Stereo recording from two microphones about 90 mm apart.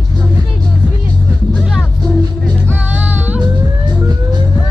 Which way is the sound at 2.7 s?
20° right (ahead or behind).